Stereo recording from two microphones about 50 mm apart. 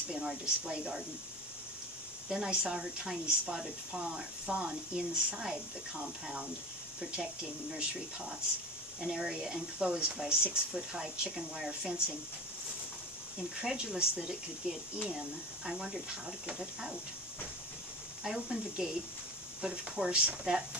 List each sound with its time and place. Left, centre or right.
0.1 s speech: centre
2.2 s speech: centre
7.0 s speech: right
9.0 s speech: centre
13.7 s speech: centre
18.2 s speech: centre